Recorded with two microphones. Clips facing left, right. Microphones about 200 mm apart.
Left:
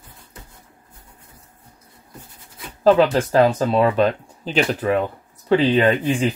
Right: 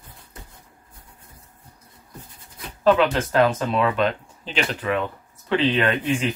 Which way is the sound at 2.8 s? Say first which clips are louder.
Left 4 dB; 35° left (ahead or behind).